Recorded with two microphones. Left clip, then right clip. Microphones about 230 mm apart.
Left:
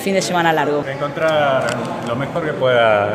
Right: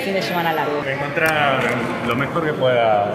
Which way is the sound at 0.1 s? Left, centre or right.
Left.